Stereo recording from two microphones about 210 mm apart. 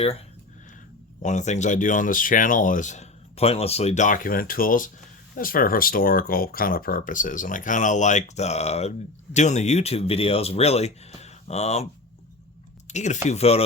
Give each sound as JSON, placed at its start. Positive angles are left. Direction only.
{"t": 1.2, "sound": "speech", "side_deg": 35}
{"t": 12.9, "sound": "speech", "side_deg": 35}